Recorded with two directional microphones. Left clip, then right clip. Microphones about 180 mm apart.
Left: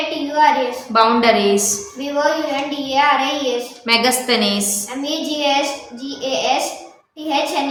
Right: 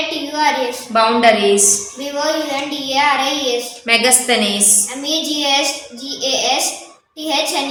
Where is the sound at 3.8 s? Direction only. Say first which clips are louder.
Right 2 dB; 55° left (ahead or behind).